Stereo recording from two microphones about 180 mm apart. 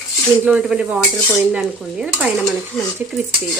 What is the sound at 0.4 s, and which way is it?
Stir, 5° right (ahead or behind).